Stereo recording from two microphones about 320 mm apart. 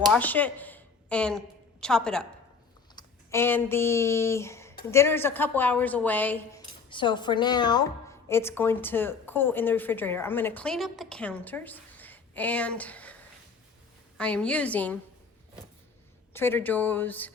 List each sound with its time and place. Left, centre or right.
0.0 s a woman's voice: centre
14.2 s a woman's voice: centre
16.3 s a woman's voice: centre